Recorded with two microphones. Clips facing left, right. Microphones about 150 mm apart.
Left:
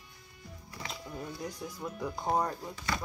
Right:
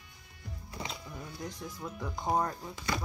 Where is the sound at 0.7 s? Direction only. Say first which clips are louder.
Right 2 dB; 25° right (ahead or behind).